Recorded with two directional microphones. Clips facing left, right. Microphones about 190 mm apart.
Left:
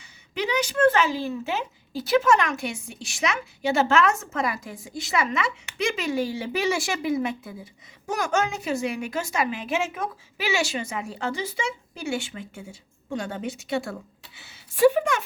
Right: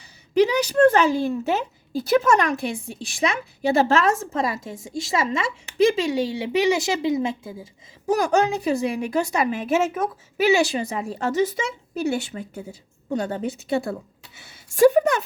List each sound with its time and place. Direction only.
0.3 s a woman's voice: 35° right (ahead or behind)